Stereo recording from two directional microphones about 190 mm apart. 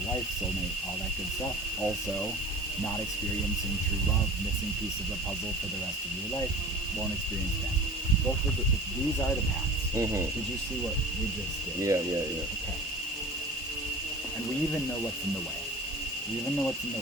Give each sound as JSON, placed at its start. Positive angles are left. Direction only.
{"t": 9.9, "sound": "speech", "side_deg": -15}
{"t": 11.8, "sound": "speech", "side_deg": -15}